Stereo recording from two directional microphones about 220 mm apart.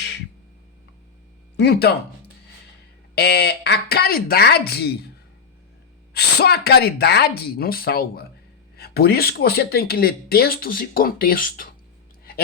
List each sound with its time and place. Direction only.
1.5 s speech: 45° left (ahead or behind)
6.1 s speech: 45° left (ahead or behind)